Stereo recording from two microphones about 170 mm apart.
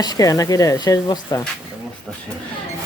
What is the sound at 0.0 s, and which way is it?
Speech, 20° left (ahead or behind).